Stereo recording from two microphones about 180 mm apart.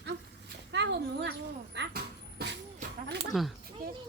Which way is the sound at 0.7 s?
75° right (ahead or behind).